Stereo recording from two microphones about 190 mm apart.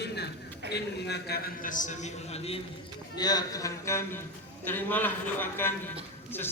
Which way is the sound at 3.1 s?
20° left (ahead or behind).